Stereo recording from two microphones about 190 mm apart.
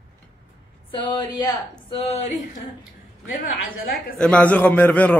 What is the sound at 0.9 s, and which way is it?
Speech, 25° left (ahead or behind).